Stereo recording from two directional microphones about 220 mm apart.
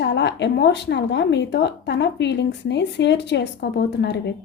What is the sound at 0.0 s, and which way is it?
A woman's voice, 50° left (ahead or behind).